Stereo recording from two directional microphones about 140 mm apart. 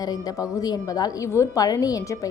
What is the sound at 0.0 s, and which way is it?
A woman's voice, 25° left (ahead or behind).